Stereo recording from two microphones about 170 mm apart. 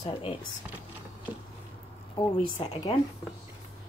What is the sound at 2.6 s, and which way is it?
Speech, 30° left (ahead or behind).